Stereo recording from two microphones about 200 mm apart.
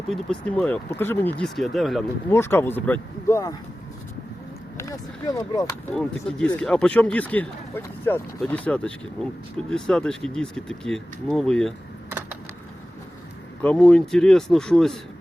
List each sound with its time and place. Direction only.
0.1 s speech: 5° left (ahead or behind)
2.3 s speech: 10° left (ahead or behind)
4.8 s speech: 15° left (ahead or behind)
5.9 s speech: 5° left (ahead or behind)
13.6 s speech: 5° left (ahead or behind)